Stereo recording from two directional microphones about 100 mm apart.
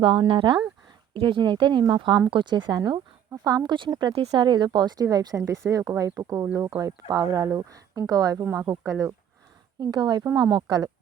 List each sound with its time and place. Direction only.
0.3 s speech: 55° right (ahead or behind); by 9.1 s 30° right (ahead or behind)
9.8 s speech: 45° right (ahead or behind)